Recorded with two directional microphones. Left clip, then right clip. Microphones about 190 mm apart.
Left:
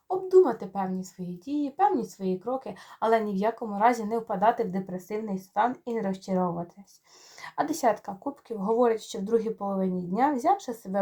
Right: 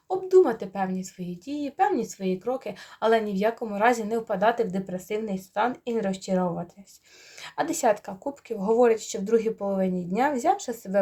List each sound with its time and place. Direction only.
0.1 s speech: 25° right (ahead or behind)
7.4 s speech: 20° right (ahead or behind)